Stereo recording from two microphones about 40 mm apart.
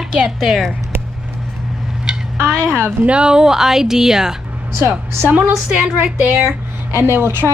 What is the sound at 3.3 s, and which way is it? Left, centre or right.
Speech, centre.